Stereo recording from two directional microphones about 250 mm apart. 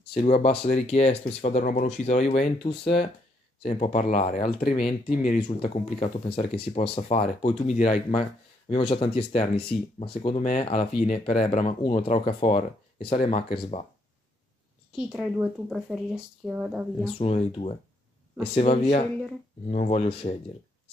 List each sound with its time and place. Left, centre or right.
0.0 s speech: left
0.3 s speech: left
14.9 s speech: centre
17.2 s speech: left